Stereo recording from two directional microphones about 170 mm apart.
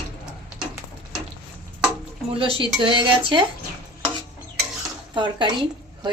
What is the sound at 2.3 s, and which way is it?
A woman's voice, 35° right (ahead or behind).